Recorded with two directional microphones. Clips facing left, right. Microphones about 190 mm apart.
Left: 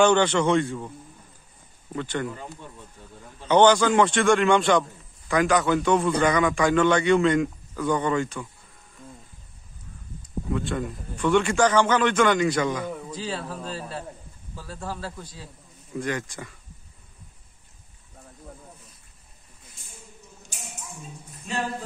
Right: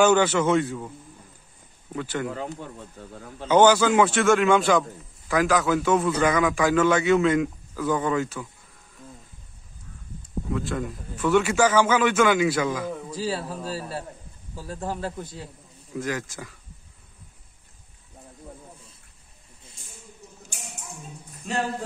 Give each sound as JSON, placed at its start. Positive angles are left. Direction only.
{"t": 0.0, "sound": "a man's voice", "side_deg": -5}
{"t": 2.2, "sound": "speech", "side_deg": -70}
{"t": 3.4, "sound": "a man's voice", "side_deg": -5}
{"t": 10.5, "sound": "a man's voice", "side_deg": 0}
{"t": 15.9, "sound": "a man's voice", "side_deg": 0}